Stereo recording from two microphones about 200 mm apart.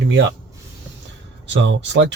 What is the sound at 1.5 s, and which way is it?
Speech, 65° right (ahead or behind).